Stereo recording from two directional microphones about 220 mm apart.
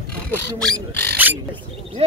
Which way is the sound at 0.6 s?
5° left (ahead or behind).